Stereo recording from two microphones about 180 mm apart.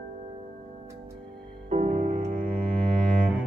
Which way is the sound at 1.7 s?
45° right (ahead or behind).